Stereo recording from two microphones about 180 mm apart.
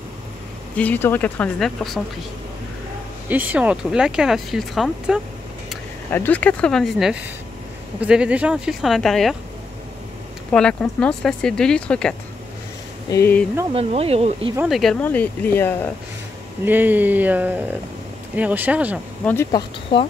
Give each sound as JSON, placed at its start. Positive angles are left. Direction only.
{"t": 0.7, "sound": "speech", "side_deg": 10}
{"t": 3.3, "sound": "speech", "side_deg": -10}
{"t": 6.1, "sound": "speech", "side_deg": 10}
{"t": 10.5, "sound": "speech", "side_deg": 5}
{"t": 13.7, "sound": "speech", "side_deg": -35}
{"t": 14.7, "sound": "speech", "side_deg": 0}
{"t": 16.6, "sound": "speech", "side_deg": -10}
{"t": 19.5, "sound": "speech", "side_deg": 20}